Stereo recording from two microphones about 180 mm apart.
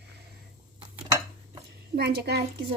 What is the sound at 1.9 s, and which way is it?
Speech, 60° right (ahead or behind).